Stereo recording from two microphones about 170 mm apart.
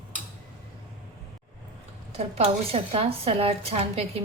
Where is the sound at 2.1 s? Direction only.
35° right (ahead or behind).